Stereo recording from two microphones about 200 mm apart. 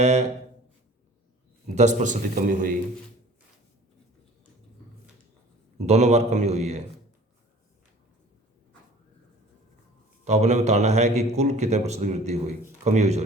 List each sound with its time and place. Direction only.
0.0 s a man's voice: 30° right (ahead or behind)
1.7 s a man's voice: 35° right (ahead or behind)
5.8 s a man's voice: 35° right (ahead or behind)
10.2 s a man's voice: 35° right (ahead or behind)